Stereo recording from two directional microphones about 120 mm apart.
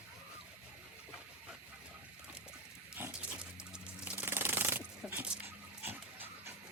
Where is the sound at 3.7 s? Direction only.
5° right (ahead or behind).